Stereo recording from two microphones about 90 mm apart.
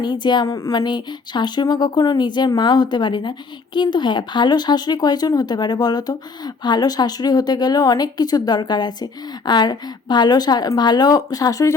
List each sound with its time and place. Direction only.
0.0 s speech: 55° left (ahead or behind)